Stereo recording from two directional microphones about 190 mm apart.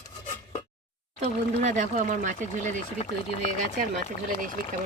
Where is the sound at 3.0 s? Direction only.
35° left (ahead or behind).